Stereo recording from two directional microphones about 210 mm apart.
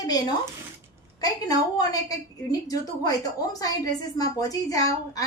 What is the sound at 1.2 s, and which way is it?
A woman's voice, 15° left (ahead or behind).